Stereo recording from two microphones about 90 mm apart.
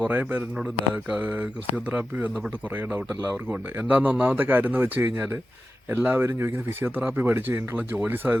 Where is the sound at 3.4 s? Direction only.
20° right (ahead or behind).